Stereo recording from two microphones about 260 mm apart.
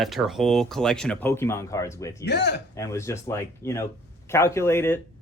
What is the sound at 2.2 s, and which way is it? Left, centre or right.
Speech, left.